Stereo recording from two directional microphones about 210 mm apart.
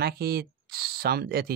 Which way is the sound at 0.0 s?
50° right (ahead or behind).